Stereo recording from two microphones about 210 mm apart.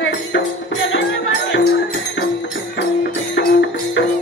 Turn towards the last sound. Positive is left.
turn(degrees=55)  # may be behind; listen again after turning